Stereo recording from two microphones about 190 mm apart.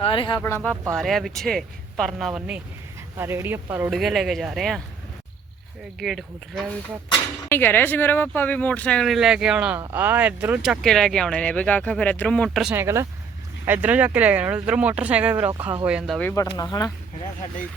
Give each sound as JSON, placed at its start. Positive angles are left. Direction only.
{"t": 0.0, "sound": "speech", "side_deg": 25}
{"t": 0.4, "sound": "speech", "side_deg": 10}
{"t": 6.0, "sound": "speech", "side_deg": 0}
{"t": 7.5, "sound": "speech", "side_deg": 10}
{"t": 12.7, "sound": "speech", "side_deg": -15}
{"t": 16.6, "sound": "speech", "side_deg": 20}